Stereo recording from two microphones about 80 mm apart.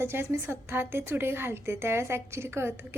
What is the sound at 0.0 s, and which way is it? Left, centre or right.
A woman's voice, right.